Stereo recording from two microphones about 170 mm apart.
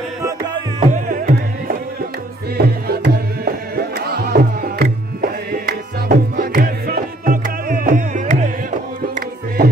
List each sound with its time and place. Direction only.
0.9 s music: 55° right (ahead or behind)
2.5 s music: 65° right (ahead or behind); by 9.7 s 50° right (ahead or behind)